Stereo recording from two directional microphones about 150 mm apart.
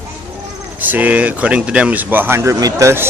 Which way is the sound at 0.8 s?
10° right (ahead or behind).